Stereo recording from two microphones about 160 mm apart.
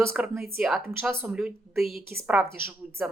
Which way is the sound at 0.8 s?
15° right (ahead or behind).